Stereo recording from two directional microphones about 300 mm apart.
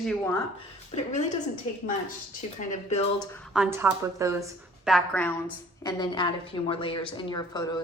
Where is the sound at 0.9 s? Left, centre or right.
Left.